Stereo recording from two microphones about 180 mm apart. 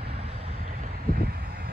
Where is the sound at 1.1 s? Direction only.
60° right (ahead or behind).